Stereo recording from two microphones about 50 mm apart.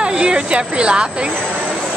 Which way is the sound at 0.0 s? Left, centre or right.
Centre.